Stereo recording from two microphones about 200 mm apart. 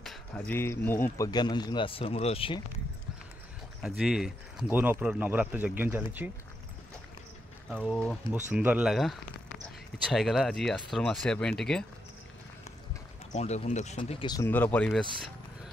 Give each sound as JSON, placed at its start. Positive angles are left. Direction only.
{"t": 0.0, "sound": "a sound", "side_deg": 0}
{"t": 0.6, "sound": "a man's voice", "side_deg": 10}
{"t": 3.8, "sound": "speech", "side_deg": 0}
{"t": 7.7, "sound": "speech", "side_deg": 0}
{"t": 8.5, "sound": "speech", "side_deg": -10}
{"t": 13.3, "sound": "speech", "side_deg": 35}
{"t": 14.2, "sound": "a man's voice", "side_deg": 20}
{"t": 14.5, "sound": "speech", "side_deg": 10}